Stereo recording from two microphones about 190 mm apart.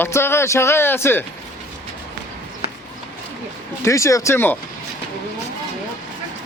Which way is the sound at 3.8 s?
15° left (ahead or behind).